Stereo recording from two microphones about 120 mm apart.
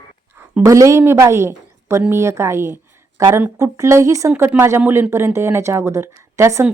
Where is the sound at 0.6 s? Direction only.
25° right (ahead or behind).